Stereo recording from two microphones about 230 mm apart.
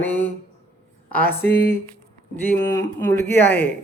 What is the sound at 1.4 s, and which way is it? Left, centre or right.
Speech, left.